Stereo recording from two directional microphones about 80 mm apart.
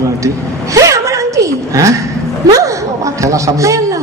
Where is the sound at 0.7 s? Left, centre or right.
Right.